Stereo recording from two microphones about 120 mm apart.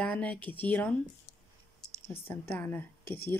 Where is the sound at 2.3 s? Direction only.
15° left (ahead or behind).